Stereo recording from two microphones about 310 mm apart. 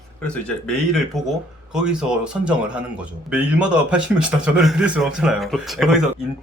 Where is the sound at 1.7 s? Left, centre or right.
Centre.